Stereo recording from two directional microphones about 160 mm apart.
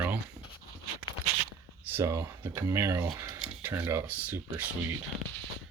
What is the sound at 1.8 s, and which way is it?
Speech, 15° right (ahead or behind).